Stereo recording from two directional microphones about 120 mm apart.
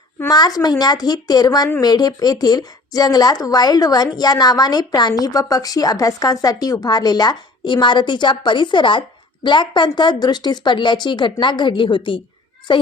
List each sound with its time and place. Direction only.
0.3 s a woman's voice: 30° left (ahead or behind)